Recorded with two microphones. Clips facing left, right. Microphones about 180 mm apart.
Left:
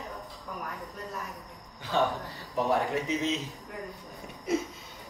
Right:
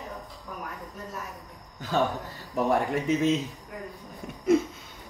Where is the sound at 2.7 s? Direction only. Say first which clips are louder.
Right 4 dB; 50° right (ahead or behind).